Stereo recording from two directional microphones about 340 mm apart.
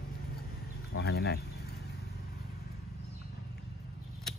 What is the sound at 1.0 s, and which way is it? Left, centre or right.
Speech, left.